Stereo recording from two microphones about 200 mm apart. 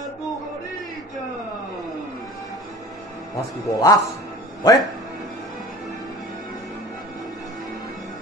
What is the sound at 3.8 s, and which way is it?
Speech, 15° left (ahead or behind).